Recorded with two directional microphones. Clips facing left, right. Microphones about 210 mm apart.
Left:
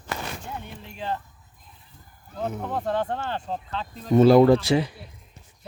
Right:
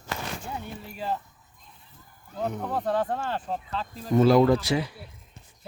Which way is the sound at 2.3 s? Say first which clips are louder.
Even; centre (ahead or behind).